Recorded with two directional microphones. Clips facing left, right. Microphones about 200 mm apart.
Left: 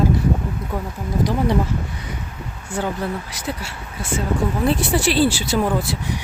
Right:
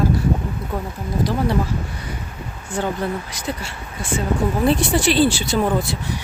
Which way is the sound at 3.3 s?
5° left (ahead or behind).